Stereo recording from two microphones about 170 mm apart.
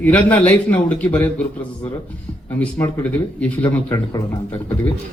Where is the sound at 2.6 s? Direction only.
15° left (ahead or behind).